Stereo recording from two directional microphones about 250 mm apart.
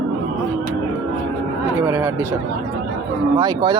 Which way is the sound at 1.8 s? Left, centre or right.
Centre.